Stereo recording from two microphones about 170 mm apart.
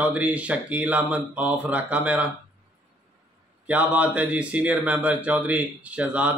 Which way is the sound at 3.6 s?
10° right (ahead or behind).